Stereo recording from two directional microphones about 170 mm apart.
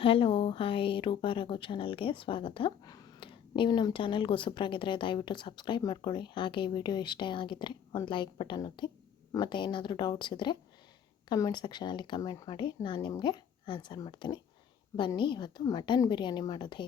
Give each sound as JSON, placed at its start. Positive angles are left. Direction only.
{"t": 0.0, "sound": "speech", "side_deg": 30}